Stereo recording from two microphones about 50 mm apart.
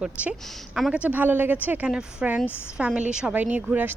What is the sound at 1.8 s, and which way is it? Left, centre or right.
Speech, centre.